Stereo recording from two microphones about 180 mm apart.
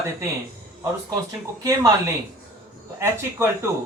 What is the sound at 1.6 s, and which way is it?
Speech, 15° right (ahead or behind).